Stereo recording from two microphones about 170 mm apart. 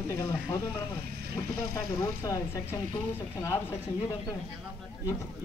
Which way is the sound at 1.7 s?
15° left (ahead or behind).